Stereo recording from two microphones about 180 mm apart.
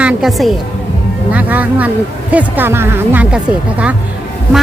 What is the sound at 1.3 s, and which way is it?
Speech, 10° right (ahead or behind).